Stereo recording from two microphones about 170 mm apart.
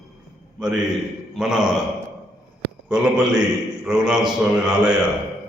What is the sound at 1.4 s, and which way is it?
Speech, 5° right (ahead or behind).